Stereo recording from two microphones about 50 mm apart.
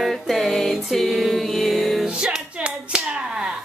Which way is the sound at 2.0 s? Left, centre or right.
Centre.